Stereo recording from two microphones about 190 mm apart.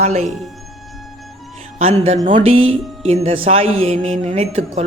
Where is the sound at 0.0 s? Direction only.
35° right (ahead or behind).